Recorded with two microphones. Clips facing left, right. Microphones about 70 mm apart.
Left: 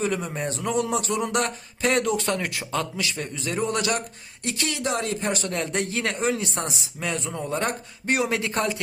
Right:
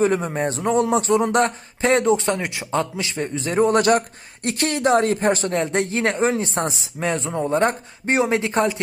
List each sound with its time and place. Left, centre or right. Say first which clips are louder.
0.0 s a man's voice: right 7 dB; right